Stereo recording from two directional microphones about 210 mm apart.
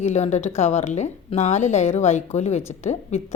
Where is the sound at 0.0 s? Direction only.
30° left (ahead or behind).